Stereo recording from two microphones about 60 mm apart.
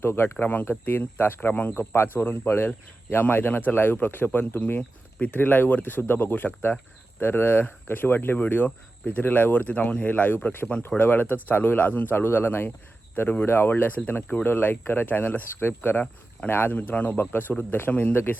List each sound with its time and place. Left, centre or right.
0.0 s speech: left